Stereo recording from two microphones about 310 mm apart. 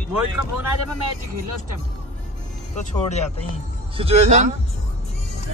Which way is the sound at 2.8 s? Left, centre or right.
Left.